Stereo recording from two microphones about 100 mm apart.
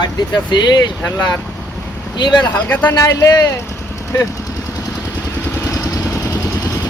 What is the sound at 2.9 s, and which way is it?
Speech, 35° left (ahead or behind).